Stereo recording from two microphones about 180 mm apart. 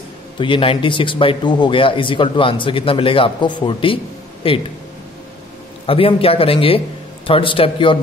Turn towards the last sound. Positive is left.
turn(degrees=30)  # may be behind; listen again after turning